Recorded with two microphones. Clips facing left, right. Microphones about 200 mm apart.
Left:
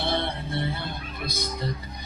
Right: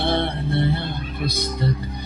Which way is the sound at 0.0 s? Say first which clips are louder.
Right 6 dB; 60° right (ahead or behind).